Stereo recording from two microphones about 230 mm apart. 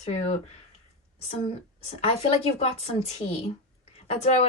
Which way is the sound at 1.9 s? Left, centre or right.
Left.